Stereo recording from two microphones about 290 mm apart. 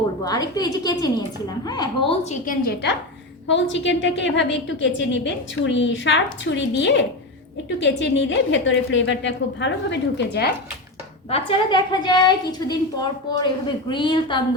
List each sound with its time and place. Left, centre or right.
0.3 s a woman's voice: centre
2.4 s a woman's voice: left
11.3 s a woman's voice: centre